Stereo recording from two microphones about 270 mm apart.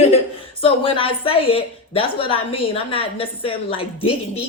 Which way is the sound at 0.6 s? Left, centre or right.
Centre.